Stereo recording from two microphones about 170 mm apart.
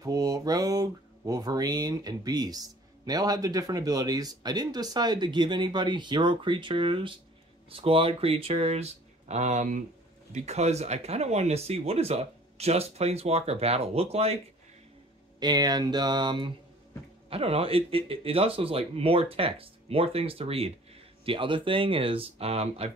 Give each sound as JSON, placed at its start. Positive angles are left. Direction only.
{"t": 0.0, "sound": "speech", "side_deg": -20}
{"t": 15.4, "sound": "speech", "side_deg": -25}